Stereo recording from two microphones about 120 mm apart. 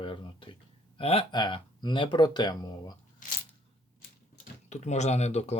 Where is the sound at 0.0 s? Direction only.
45° left (ahead or behind).